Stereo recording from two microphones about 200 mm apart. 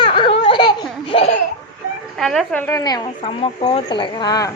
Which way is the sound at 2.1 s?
Centre (ahead or behind).